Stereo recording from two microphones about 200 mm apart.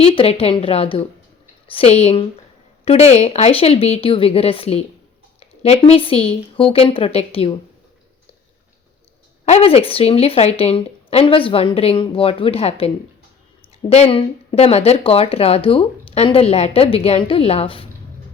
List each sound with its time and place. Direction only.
0.0 s a woman's voice: 30° left (ahead or behind)
9.5 s speech: 30° left (ahead or behind)
13.9 s speech: 30° left (ahead or behind)